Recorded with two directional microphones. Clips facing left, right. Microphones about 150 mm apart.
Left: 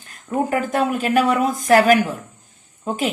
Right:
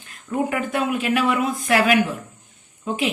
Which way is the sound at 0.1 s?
40° left (ahead or behind).